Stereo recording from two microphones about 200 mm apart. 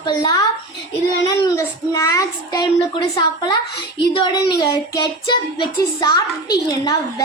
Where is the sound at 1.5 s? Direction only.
15° left (ahead or behind).